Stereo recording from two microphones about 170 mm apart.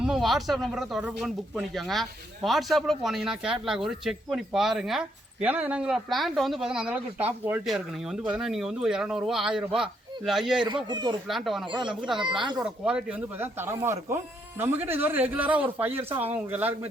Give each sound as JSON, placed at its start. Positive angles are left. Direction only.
{"t": 0.0, "sound": "speech", "side_deg": 0}
{"t": 10.8, "sound": "speech", "side_deg": -25}
{"t": 11.3, "sound": "speech", "side_deg": 0}
{"t": 11.6, "sound": "speech", "side_deg": -30}
{"t": 12.6, "sound": "speech", "side_deg": -5}